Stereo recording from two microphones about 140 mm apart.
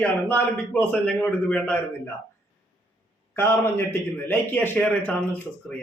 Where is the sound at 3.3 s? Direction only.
15° left (ahead or behind).